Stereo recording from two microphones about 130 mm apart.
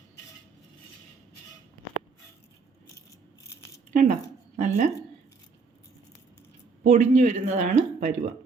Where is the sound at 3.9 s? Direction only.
70° right (ahead or behind).